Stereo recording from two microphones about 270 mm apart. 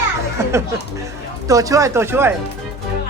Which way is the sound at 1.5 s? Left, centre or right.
Centre.